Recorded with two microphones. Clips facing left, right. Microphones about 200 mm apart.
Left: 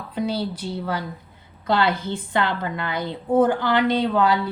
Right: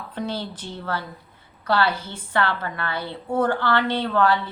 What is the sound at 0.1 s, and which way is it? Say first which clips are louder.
A woman's voice: left 5 dB; 10° left (ahead or behind).